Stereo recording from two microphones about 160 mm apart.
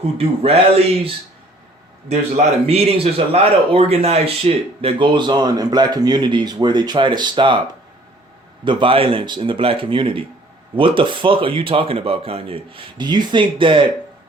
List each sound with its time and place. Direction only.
0.0 s speech: 35° right (ahead or behind)
2.0 s speech: 40° right (ahead or behind)
8.6 s speech: 30° right (ahead or behind)